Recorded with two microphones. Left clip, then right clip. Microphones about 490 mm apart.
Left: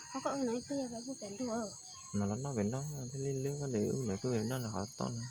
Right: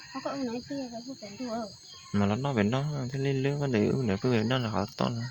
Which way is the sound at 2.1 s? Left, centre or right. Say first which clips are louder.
Right 10 dB; left.